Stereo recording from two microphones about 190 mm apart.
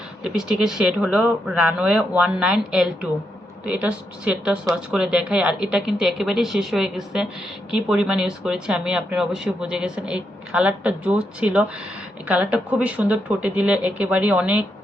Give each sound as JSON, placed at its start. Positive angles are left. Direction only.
{"t": 0.2, "sound": "speech", "side_deg": -5}